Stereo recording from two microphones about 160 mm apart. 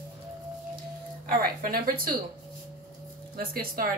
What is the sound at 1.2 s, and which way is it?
Speech, 70° right (ahead or behind).